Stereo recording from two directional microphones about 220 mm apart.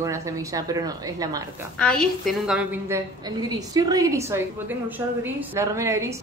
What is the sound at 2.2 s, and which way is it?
Speech, 5° right (ahead or behind).